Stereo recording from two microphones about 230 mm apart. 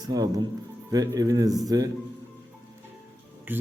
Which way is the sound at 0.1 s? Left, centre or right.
Centre.